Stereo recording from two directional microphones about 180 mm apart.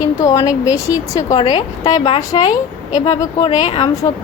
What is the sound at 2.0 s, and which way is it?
Speech, 30° left (ahead or behind).